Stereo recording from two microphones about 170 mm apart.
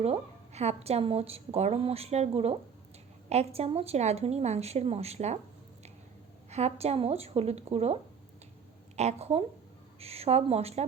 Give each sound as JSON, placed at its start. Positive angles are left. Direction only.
{"t": 0.0, "sound": "a woman's voice", "side_deg": -40}
{"t": 6.5, "sound": "a woman's voice", "side_deg": -40}
{"t": 9.0, "sound": "a woman's voice", "side_deg": -40}